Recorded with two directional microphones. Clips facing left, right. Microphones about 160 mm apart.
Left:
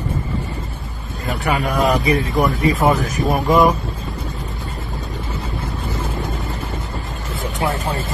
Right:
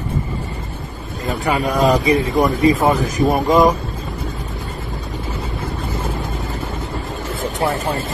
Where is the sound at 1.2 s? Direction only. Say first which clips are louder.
Right 2 dB; 20° right (ahead or behind).